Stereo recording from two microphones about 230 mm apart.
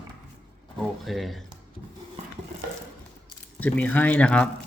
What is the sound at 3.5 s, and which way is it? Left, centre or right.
Speech, centre.